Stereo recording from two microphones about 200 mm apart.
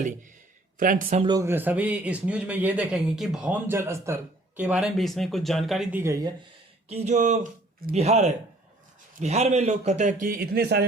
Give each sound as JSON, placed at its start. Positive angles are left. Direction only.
{"t": 0.8, "sound": "a man's voice", "side_deg": -45}
{"t": 1.2, "sound": "a man's voice", "side_deg": -20}
{"t": 6.8, "sound": "a man's voice", "side_deg": -35}